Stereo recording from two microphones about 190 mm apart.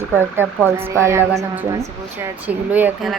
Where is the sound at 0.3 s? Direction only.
10° right (ahead or behind).